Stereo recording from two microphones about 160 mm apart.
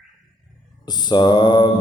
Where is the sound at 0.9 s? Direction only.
25° left (ahead or behind).